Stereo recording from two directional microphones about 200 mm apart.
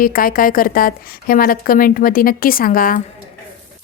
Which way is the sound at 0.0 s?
45° left (ahead or behind).